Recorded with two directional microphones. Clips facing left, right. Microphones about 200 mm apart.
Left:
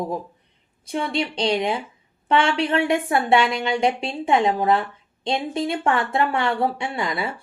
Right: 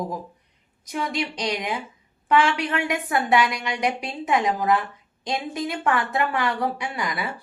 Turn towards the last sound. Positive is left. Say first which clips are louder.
# left 3 dB
turn(degrees=25)  # may be behind; listen again after turning